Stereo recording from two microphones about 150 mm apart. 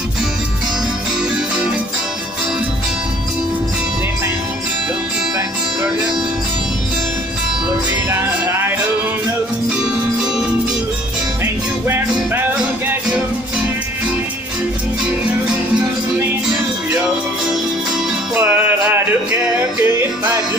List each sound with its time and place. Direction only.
8.1 s music: 15° right (ahead or behind)
11.4 s music: 15° right (ahead or behind)
18.3 s music: 10° right (ahead or behind)